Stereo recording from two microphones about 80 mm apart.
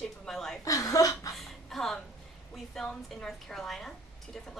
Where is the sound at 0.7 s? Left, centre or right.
Left.